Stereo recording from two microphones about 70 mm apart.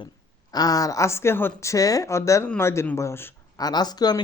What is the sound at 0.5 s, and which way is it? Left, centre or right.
Speech, left.